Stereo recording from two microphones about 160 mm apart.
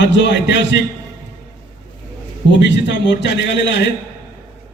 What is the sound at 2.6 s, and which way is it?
A man's voice, 90° left.